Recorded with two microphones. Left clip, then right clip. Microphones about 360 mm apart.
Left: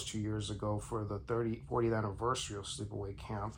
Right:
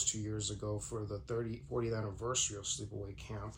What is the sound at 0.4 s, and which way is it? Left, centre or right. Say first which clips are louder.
Speech: left 2 dB; centre.